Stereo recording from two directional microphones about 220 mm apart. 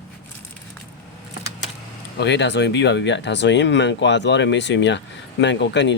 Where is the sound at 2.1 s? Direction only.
50° left (ahead or behind).